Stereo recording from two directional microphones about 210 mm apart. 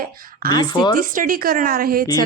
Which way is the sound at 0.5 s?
20° left (ahead or behind).